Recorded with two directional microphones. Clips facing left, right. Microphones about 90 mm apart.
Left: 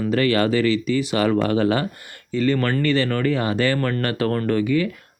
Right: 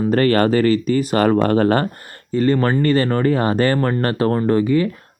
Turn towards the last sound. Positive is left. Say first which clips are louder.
# right 4 dB
turn(degrees=-35)  # may be behind; listen again after turning